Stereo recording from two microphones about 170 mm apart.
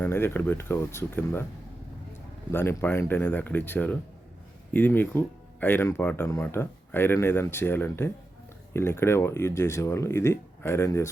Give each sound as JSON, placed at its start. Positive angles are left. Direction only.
{"t": 0.0, "sound": "speech", "side_deg": 15}
{"t": 2.5, "sound": "speech", "side_deg": 15}